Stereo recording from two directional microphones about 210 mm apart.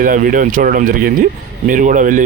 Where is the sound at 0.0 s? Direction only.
40° right (ahead or behind).